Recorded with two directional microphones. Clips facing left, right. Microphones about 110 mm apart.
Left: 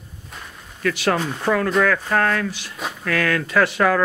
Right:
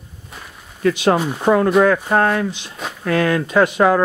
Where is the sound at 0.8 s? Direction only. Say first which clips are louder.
Right 5 dB; 20° right (ahead or behind).